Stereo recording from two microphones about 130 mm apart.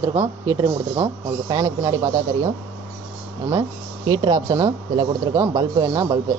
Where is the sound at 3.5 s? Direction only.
35° right (ahead or behind).